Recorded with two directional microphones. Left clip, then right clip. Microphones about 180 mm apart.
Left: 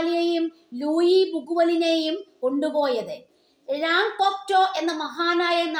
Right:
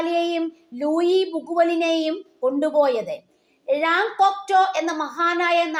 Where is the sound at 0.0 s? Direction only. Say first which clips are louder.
Right 1 dB; 20° right (ahead or behind).